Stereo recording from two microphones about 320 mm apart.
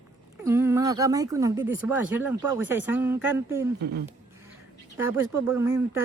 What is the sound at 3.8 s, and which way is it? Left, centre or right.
Speech, right.